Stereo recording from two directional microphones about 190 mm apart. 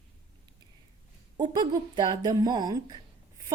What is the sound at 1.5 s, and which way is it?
A woman's voice, 20° right (ahead or behind).